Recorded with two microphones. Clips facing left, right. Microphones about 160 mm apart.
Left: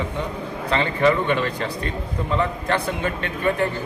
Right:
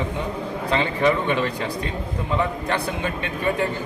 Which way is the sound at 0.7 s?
15° right (ahead or behind).